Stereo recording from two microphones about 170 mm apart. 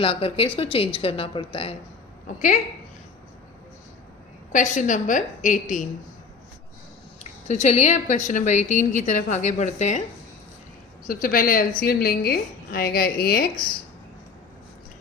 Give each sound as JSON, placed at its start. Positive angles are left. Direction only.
{"t": 0.0, "sound": "speech", "side_deg": 35}
{"t": 2.2, "sound": "a woman's voice", "side_deg": 50}
{"t": 4.5, "sound": "a woman's voice", "side_deg": 45}
{"t": 7.4, "sound": "a woman's voice", "side_deg": 40}
{"t": 11.0, "sound": "a woman's voice", "side_deg": 55}